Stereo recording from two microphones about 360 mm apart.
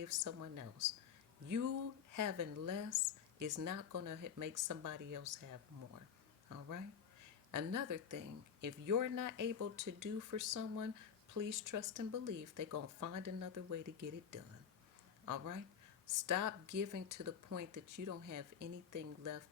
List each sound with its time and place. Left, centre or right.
0.0 s speech: right
15.3 s speech: right